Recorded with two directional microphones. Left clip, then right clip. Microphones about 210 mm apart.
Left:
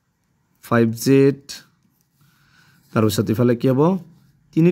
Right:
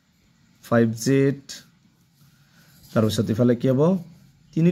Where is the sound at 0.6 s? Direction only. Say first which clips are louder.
Left 2 dB; 60° left (ahead or behind).